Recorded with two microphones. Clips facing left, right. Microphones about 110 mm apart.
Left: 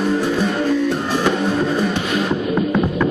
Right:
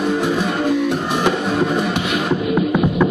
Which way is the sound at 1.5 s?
70° right (ahead or behind).